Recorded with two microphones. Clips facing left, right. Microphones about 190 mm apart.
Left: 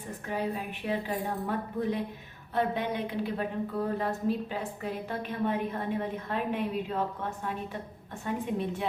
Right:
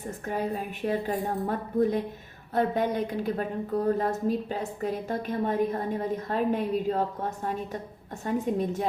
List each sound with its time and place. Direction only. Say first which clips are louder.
0.3 s a woman's voice: right 2 dB; 45° right (ahead or behind)